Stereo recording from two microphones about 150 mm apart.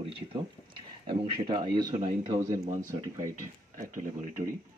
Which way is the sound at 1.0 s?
35° right (ahead or behind).